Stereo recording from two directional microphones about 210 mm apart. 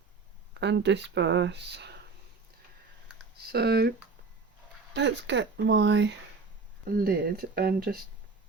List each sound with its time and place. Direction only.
0.5 s speech: 55° right (ahead or behind)
3.5 s speech: 50° right (ahead or behind)
4.9 s speech: 55° right (ahead or behind)
6.9 s speech: 45° right (ahead or behind)